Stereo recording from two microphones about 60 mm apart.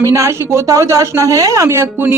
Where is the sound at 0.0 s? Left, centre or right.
Right.